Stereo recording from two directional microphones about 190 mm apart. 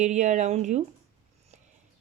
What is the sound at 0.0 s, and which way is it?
Speech, 40° right (ahead or behind).